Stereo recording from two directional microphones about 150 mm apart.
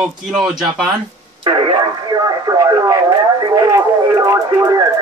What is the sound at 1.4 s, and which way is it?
Speech, 30° right (ahead or behind).